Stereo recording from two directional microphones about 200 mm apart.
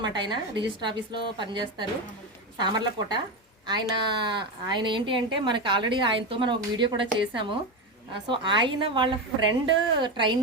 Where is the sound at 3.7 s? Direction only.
20° right (ahead or behind).